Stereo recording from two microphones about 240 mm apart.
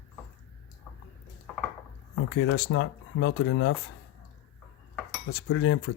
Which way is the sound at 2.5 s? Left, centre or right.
Left.